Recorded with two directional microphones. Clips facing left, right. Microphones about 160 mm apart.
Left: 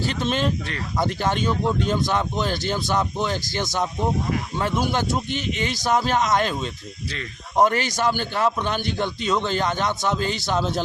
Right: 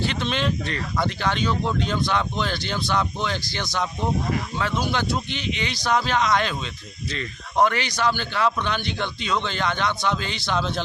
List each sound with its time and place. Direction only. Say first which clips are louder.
0.0 s a man's voice: left 2 dB; 45° left (ahead or behind)
0.6 s speech: even; 10° left (ahead or behind)
1.0 s a man's voice: left 2 dB; 45° left (ahead or behind)
7.1 s speech: right 1 dB; 10° left (ahead or behind)
7.6 s a man's voice: left 1 dB; 45° left (ahead or behind)